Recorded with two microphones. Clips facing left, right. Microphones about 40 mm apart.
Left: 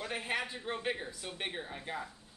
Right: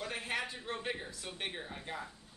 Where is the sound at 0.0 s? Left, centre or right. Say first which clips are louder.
Left 2 dB; centre.